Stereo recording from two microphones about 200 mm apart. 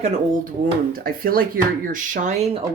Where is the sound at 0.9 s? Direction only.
45° right (ahead or behind).